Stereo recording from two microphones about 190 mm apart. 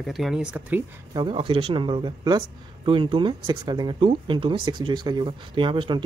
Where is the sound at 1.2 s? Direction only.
25° right (ahead or behind).